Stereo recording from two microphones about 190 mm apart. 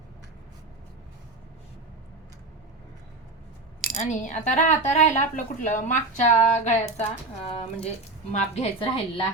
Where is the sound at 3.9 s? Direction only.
40° left (ahead or behind).